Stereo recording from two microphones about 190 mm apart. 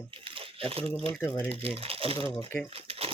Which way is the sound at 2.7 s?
30° right (ahead or behind).